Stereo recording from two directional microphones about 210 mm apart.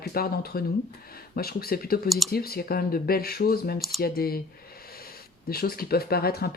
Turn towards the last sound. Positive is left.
turn(degrees=45)  # may be behind; listen again after turning